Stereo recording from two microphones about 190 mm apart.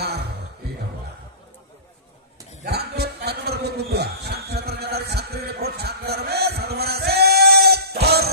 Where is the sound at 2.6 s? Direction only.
60° right (ahead or behind).